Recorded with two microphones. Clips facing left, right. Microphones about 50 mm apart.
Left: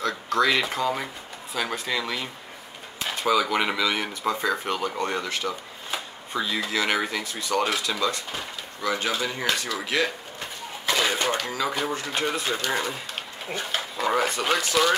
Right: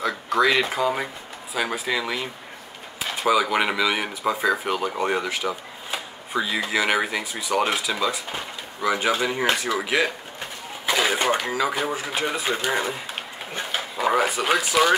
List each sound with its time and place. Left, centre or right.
0.0 s speech: centre
12.4 s speech: centre